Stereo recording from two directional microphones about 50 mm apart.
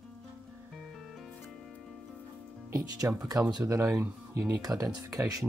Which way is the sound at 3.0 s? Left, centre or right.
Right.